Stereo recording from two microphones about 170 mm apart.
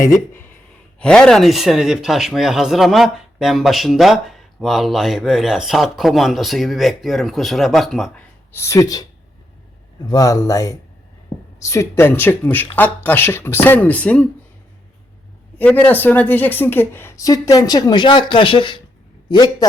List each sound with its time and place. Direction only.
0.9 s speech: 5° left (ahead or behind)
8.5 s speech: 15° left (ahead or behind)
10.1 s a woman's voice: 20° left (ahead or behind)
15.5 s a woman's voice: 10° left (ahead or behind)